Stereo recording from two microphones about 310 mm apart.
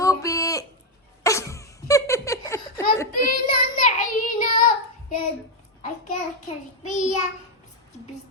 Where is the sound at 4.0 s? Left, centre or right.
Left.